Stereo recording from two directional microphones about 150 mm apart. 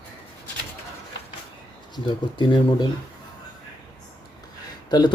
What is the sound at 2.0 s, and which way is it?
Speech, 30° left (ahead or behind).